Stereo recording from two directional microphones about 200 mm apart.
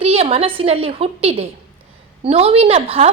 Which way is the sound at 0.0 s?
30° right (ahead or behind).